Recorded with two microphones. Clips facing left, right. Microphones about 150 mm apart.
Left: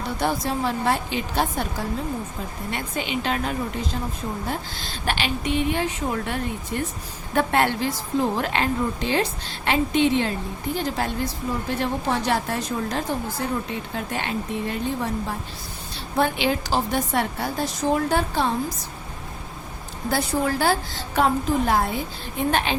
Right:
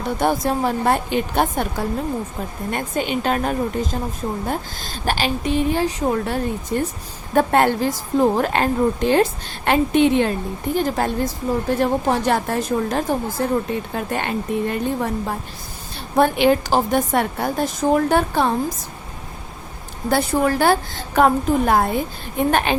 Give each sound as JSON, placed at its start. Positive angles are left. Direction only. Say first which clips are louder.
{"t": 0.2, "sound": "a woman's voice", "louder": "right 5 dB", "side_deg": -50}
{"t": 2.6, "sound": "a woman's voice", "louder": "right 6 dB", "side_deg": -45}
{"t": 16.1, "sound": "a woman's voice", "louder": "right 7 dB", "side_deg": -50}
{"t": 20.1, "sound": "a woman's voice", "louder": "right 5 dB", "side_deg": -60}